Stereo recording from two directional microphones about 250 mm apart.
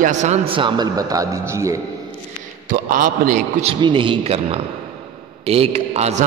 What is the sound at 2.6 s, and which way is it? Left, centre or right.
A man's voice, right.